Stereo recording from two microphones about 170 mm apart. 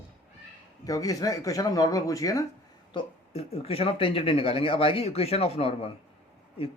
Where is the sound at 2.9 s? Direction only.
35° left (ahead or behind).